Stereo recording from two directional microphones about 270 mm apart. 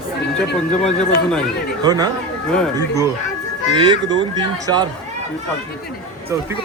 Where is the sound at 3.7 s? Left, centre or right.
Centre.